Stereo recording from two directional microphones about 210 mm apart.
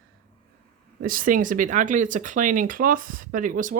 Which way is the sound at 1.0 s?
40° right (ahead or behind).